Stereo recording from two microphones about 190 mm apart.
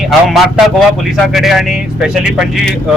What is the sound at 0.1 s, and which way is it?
Speech, centre (ahead or behind).